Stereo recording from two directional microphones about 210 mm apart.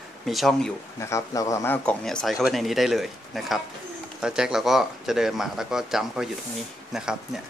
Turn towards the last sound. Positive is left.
turn(degrees=-5)  # may be behind; listen again after turning